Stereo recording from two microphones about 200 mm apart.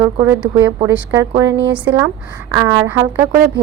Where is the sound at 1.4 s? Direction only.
65° right (ahead or behind).